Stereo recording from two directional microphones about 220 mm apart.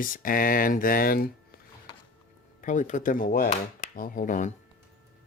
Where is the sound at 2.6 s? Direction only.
35° left (ahead or behind).